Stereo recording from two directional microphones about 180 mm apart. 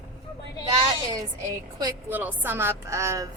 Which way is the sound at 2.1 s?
10° right (ahead or behind).